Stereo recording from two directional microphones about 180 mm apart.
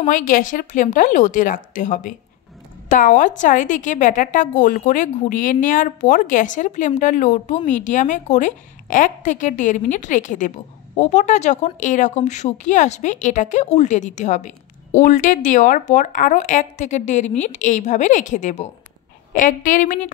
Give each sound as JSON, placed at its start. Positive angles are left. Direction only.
{"t": 0.0, "sound": "speech", "side_deg": 50}